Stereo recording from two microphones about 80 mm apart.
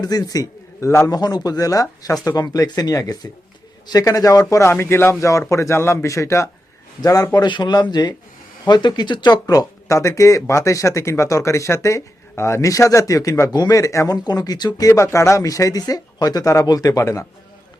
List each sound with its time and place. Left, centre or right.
0.0 s a man's voice: left
1.0 s speech: left
4.6 s speech: left
7.0 s speech: left
7.3 s speech: left
13.5 s speech: left
13.7 s speech: left
14.3 s speech: left
14.8 s speech: left
17.0 s speech: left